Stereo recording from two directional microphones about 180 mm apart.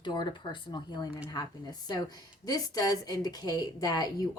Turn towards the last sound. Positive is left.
turn(degrees=20)  # may be behind; listen again after turning